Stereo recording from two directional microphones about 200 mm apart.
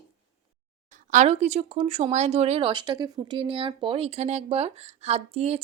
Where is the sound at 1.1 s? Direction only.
35° right (ahead or behind).